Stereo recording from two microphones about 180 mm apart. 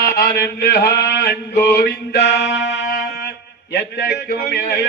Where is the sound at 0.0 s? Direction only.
60° left (ahead or behind).